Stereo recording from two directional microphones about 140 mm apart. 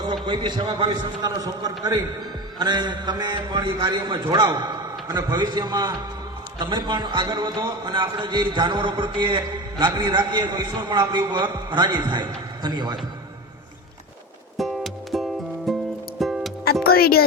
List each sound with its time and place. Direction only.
0.0 s a man's voice: 35° right (ahead or behind)
14.6 s music: centre (ahead or behind)
16.8 s speech: 90° left